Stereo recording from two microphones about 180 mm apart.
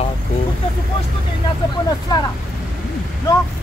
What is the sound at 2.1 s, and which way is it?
Speech, 25° left (ahead or behind).